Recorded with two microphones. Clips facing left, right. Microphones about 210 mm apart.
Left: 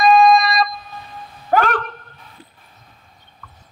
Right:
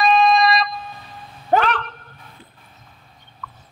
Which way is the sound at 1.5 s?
25° right (ahead or behind).